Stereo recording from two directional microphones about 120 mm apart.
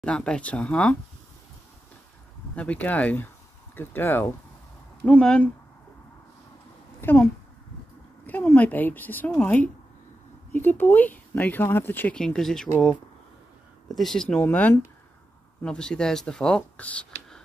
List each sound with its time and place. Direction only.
0.0 s speech: 10° left (ahead or behind)
2.5 s speech: 10° left (ahead or behind)
7.0 s a sound: 15° left (ahead or behind)
8.3 s speech: 15° left (ahead or behind)
12.2 s speech: 5° left (ahead or behind)
13.8 s speech: centre (ahead or behind)